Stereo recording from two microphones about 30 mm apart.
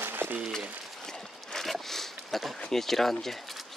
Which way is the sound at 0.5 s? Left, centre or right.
Centre.